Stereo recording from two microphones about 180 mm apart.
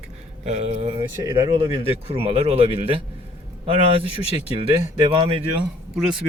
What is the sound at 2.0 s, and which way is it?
Speech, 30° right (ahead or behind).